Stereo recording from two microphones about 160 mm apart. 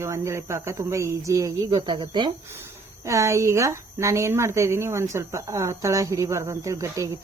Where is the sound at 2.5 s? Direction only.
15° right (ahead or behind).